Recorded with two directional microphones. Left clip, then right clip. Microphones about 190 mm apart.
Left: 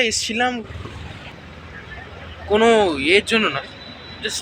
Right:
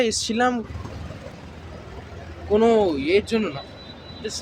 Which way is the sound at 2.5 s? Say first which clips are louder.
Left 3 dB; centre (ahead or behind).